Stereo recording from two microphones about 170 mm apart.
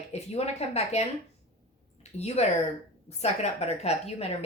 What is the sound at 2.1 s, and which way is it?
A woman's voice, 40° left (ahead or behind).